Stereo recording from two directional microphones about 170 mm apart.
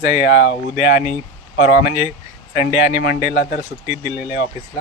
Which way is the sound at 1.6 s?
60° left (ahead or behind).